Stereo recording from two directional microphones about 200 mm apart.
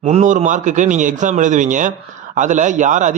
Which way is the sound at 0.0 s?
35° right (ahead or behind).